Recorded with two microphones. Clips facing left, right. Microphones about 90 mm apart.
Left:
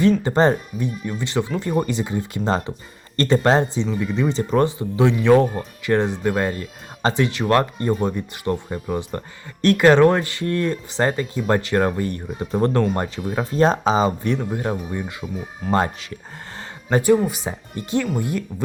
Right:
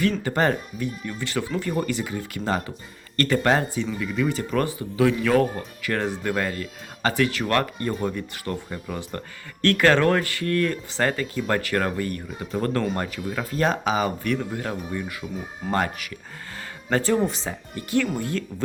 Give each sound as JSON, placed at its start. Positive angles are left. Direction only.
{"t": 0.0, "sound": "speech", "side_deg": 25}
{"t": 16.6, "sound": "a sound", "side_deg": 15}
{"t": 17.2, "sound": "speech", "side_deg": 15}